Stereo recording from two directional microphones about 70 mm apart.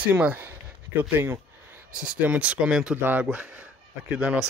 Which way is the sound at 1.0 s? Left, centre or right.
Right.